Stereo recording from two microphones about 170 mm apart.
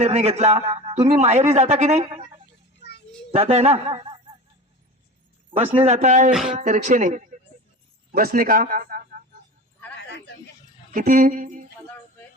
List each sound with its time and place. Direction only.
0.0 s a man's voice: 40° right (ahead or behind)
3.3 s a man's voice: 35° right (ahead or behind)
5.5 s a man's voice: 35° right (ahead or behind)
8.1 s speech: 60° right (ahead or behind)
10.1 s a sound: 90° left
10.9 s speech: 50° right (ahead or behind)